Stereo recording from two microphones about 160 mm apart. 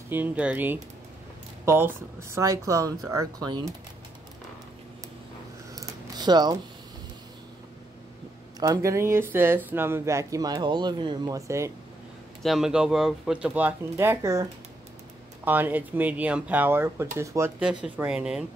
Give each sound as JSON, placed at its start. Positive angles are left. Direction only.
{"t": 0.1, "sound": "speech", "side_deg": -10}
{"t": 5.8, "sound": "a sound", "side_deg": -25}
{"t": 8.5, "sound": "speech", "side_deg": -20}
{"t": 12.4, "sound": "speech", "side_deg": 0}
{"t": 17.8, "sound": "speech", "side_deg": -10}